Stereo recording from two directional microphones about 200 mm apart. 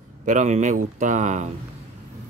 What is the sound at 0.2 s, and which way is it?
Speech, 40° right (ahead or behind).